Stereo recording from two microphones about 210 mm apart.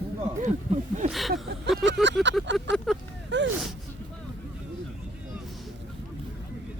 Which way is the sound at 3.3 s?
60° right (ahead or behind).